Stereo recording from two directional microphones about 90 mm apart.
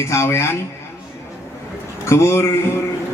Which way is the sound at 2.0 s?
30° left (ahead or behind).